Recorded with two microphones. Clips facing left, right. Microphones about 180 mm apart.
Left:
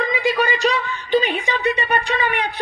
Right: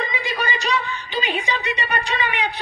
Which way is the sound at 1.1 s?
50° left (ahead or behind).